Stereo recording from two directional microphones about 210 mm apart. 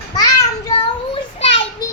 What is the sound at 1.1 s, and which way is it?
Child singing, 30° left (ahead or behind).